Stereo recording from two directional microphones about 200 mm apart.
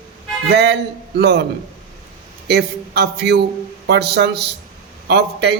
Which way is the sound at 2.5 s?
55° right (ahead or behind).